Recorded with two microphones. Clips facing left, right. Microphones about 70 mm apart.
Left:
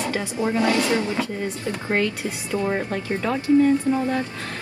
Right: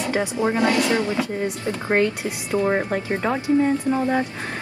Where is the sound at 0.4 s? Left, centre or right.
Right.